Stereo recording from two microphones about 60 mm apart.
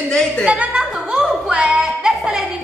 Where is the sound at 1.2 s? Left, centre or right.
Centre.